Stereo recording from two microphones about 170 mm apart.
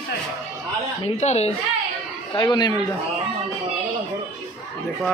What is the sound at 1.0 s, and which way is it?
Speech, 40° left (ahead or behind).